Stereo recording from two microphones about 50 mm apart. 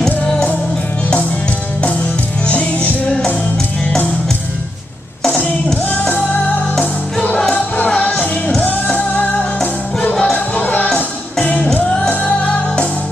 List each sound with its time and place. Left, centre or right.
2.4 s music: left
5.9 s music: left
7.3 s music: centre
8.5 s music: left
10.1 s music: centre
10.5 s music: left